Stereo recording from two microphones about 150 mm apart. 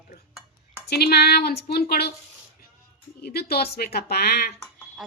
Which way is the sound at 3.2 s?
90° left.